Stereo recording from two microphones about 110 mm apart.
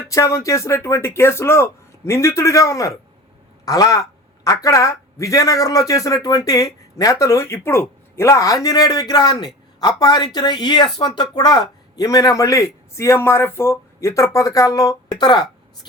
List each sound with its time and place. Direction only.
0.1 s a man's voice: 30° left (ahead or behind)
15.2 s speech: 40° left (ahead or behind)